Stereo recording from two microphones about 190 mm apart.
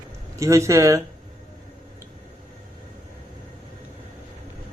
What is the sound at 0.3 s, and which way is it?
Speech, 15° right (ahead or behind).